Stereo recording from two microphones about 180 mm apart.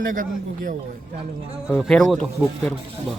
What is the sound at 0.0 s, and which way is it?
Speech, 50° right (ahead or behind).